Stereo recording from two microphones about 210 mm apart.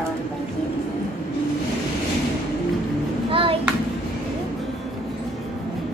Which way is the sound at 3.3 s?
25° right (ahead or behind).